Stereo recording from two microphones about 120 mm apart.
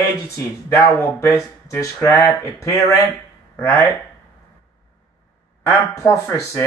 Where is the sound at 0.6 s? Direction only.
20° left (ahead or behind).